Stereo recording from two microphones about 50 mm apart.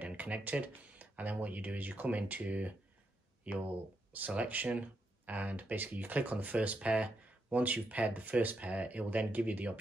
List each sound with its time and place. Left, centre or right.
0.0 s speech: right
4.3 s speech: right